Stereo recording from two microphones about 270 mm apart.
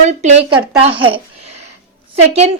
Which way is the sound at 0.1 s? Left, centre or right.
Right.